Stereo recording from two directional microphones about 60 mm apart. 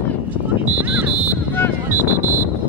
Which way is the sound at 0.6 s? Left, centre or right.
Right.